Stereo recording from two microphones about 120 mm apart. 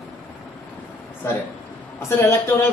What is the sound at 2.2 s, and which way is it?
Speech, 20° left (ahead or behind).